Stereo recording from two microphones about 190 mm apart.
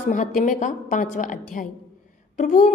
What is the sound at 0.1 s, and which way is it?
A woman's voice, 40° left (ahead or behind).